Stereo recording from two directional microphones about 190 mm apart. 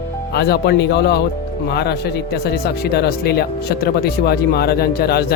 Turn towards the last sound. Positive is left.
turn(degrees=55)  # may be behind; listen again after turning